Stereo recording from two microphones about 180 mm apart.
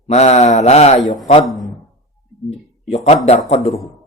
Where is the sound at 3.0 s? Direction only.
35° left (ahead or behind).